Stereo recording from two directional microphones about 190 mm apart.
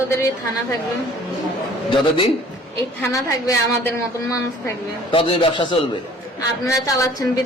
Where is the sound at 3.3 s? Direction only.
15° left (ahead or behind).